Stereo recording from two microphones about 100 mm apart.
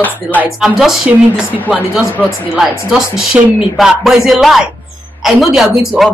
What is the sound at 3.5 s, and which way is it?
Speech, 5° right (ahead or behind).